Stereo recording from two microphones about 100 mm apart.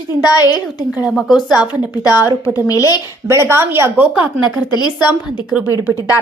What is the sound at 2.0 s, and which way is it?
A woman's voice, 35° left (ahead or behind).